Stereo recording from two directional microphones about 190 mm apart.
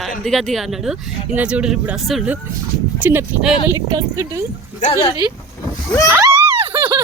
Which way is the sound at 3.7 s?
20° right (ahead or behind).